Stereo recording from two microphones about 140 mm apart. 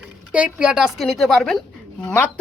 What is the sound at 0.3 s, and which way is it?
A woman's voice, 5° right (ahead or behind).